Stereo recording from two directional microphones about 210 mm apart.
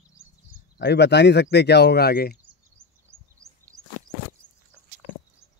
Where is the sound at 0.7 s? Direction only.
55° left (ahead or behind).